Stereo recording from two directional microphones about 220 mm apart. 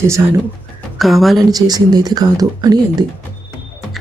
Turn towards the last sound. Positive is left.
turn(degrees=-15)  # may be behind; listen again after turning